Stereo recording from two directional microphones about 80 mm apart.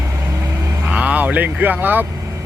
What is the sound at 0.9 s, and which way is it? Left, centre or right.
Vehicle, centre.